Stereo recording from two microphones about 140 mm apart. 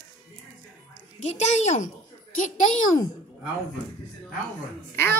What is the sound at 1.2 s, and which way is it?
Speech, 55° left (ahead or behind).